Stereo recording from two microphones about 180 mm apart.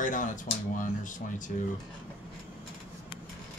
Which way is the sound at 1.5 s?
50° left (ahead or behind).